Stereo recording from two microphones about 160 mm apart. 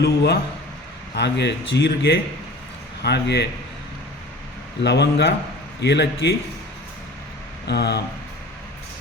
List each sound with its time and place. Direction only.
0.0 s speech: 90° left
4.8 s speech: 90° left
7.7 s speech: 90° left